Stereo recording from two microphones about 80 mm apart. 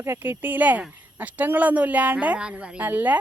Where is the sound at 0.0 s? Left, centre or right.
Right.